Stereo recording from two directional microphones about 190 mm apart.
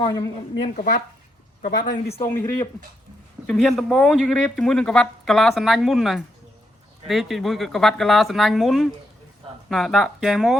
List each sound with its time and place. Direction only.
0.0 s speech: 20° left (ahead or behind)
0.6 s speech: 45° left (ahead or behind)
2.2 s speech: 15° left (ahead or behind)
3.4 s speech: 5° left (ahead or behind)